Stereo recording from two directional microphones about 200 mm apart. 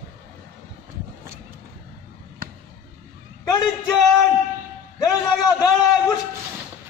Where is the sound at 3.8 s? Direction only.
Centre (ahead or behind).